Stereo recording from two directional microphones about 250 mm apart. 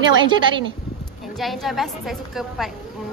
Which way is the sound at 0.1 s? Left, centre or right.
Centre.